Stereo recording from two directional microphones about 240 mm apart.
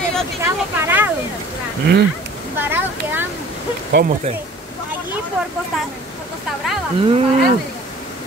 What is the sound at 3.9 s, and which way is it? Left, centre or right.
Speech, right.